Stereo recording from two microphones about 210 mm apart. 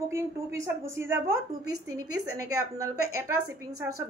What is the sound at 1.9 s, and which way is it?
Speech, 90° right.